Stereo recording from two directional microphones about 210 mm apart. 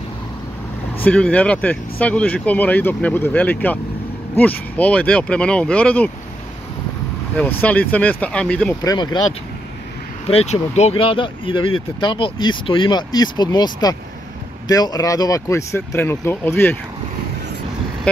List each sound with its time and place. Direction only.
1.0 s speech: 5° left (ahead or behind)
7.3 s speech: 10° left (ahead or behind)
8.8 s speech: 20° left (ahead or behind)
10.2 s speech: 30° left (ahead or behind); by 16.7 s 10° left (ahead or behind)